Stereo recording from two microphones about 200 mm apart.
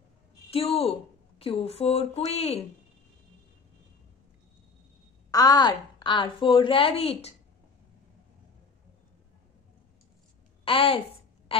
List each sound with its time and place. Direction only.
0.5 s a woman's voice: 30° left (ahead or behind)
5.3 s a woman's voice: 20° left (ahead or behind)
10.6 s a woman's voice: 25° left (ahead or behind)